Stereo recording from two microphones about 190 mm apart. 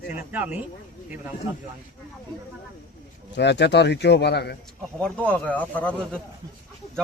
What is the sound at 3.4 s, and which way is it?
Speech, 65° left (ahead or behind).